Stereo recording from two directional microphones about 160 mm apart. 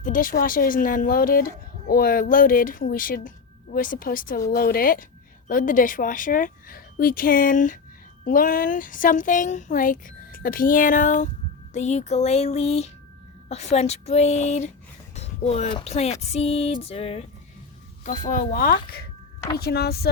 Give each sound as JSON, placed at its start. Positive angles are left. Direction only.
{"t": 0.0, "sound": "speech", "side_deg": 60}
{"t": 15.1, "sound": "a sound", "side_deg": 40}
{"t": 15.7, "sound": "music", "side_deg": 40}
{"t": 18.0, "sound": "speech", "side_deg": 50}
{"t": 19.5, "sound": "speech", "side_deg": 85}